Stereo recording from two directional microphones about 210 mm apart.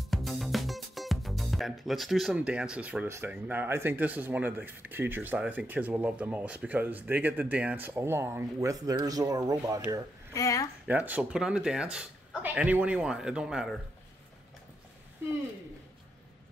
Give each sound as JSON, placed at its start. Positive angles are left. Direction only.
{"t": 0.1, "sound": "speech", "side_deg": 0}
{"t": 10.3, "sound": "speech", "side_deg": 15}
{"t": 10.9, "sound": "speech", "side_deg": -5}